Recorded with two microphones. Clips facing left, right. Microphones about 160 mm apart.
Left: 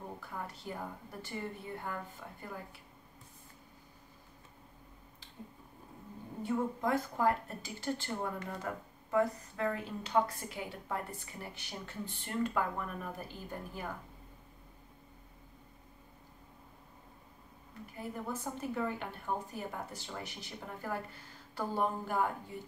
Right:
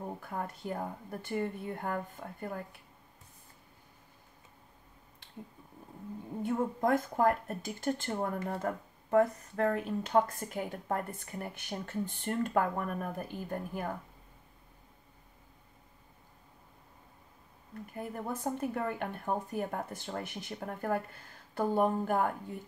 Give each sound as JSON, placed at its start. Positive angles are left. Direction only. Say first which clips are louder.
{"t": 0.2, "sound": "a woman's voice", "louder": "right 5 dB", "side_deg": -50}
{"t": 6.4, "sound": "a woman's voice", "louder": "right 3 dB", "side_deg": -50}
{"t": 17.9, "sound": "a woman's voice", "louder": "right 2 dB", "side_deg": -55}